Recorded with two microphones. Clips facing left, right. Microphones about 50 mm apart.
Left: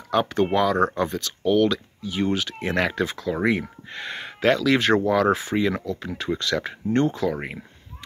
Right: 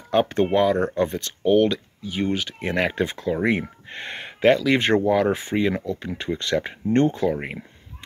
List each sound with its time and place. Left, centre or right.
0.1 s speech: right
3.0 s speech: right